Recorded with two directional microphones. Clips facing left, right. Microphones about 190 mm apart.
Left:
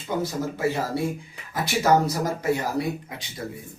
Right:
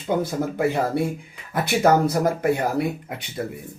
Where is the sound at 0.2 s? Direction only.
55° right (ahead or behind).